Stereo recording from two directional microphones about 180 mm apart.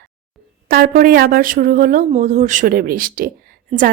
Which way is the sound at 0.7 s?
55° right (ahead or behind).